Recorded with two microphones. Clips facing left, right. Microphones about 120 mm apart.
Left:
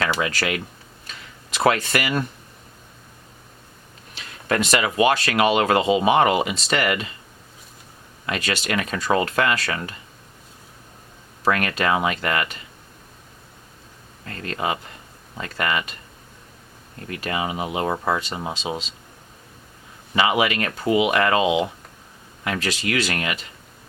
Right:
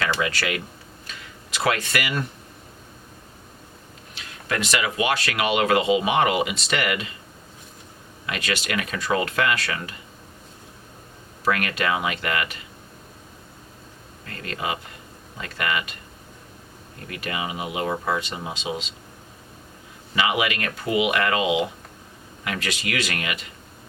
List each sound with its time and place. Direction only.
0.0 s speech: 35° left (ahead or behind)
4.4 s speech: 40° left (ahead or behind)
8.3 s speech: 30° left (ahead or behind)
11.4 s speech: 35° left (ahead or behind)
14.3 s speech: 35° left (ahead or behind)
17.1 s speech: 35° left (ahead or behind)
20.1 s speech: 35° left (ahead or behind)